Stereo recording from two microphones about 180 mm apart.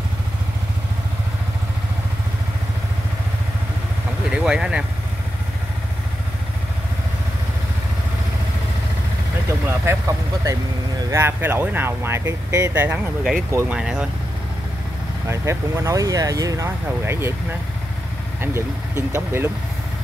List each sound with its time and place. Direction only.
4.3 s speech: 5° right (ahead or behind)
9.5 s vehicle: 15° right (ahead or behind)
11.1 s speech: 15° right (ahead or behind)
13.7 s speech: 5° right (ahead or behind)
15.2 s speech: 15° right (ahead or behind)